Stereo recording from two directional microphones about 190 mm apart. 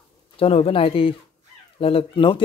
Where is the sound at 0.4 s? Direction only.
30° left (ahead or behind).